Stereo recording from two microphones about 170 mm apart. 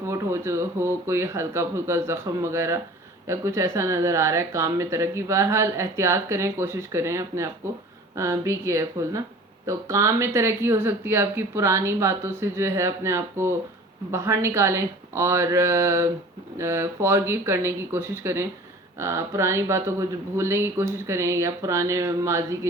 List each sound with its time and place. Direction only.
0.0 s speech: 15° right (ahead or behind)